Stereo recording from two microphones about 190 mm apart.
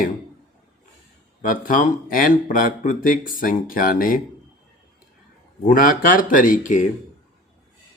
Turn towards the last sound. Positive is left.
turn(degrees=45)  # may be behind; listen again after turning